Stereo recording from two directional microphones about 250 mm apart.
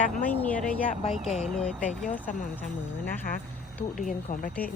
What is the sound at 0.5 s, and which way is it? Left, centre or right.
Speech, centre.